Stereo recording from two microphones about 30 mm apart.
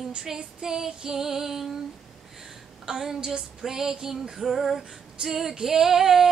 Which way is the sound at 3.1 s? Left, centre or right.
Right.